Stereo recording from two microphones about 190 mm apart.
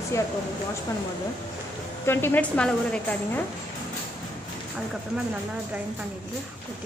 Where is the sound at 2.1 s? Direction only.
10° left (ahead or behind).